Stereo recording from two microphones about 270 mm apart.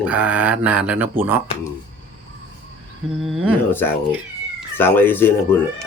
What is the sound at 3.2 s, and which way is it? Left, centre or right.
Speech, centre.